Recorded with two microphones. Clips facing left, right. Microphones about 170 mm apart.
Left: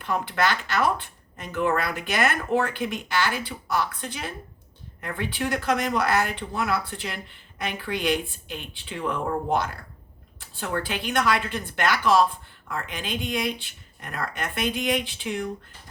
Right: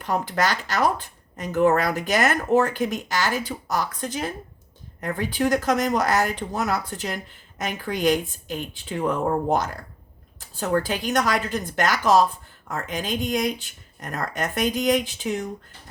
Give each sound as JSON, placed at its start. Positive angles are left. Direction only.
{"t": 0.0, "sound": "speech", "side_deg": -40}